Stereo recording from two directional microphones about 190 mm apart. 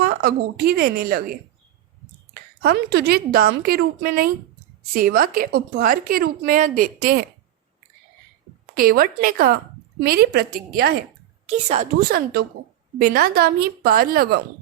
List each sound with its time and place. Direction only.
0.0 s speech: 55° right (ahead or behind)
8.7 s speech: 50° right (ahead or behind)
11.4 s a woman's voice: 35° right (ahead or behind)
11.9 s speech: 50° right (ahead or behind)